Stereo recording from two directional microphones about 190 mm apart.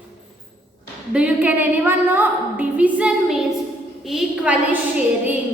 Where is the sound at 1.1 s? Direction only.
5° right (ahead or behind).